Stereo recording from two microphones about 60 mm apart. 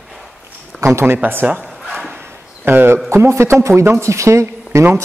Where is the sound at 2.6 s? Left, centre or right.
Right.